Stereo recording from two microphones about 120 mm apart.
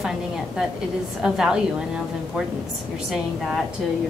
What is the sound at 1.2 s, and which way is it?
Speech, 5° right (ahead or behind).